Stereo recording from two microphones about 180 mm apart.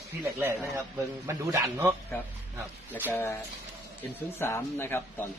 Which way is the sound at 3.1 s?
15° left (ahead or behind).